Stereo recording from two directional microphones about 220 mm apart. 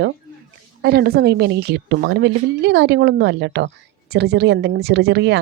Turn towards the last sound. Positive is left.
turn(degrees=-50)  # may be behind; listen again after turning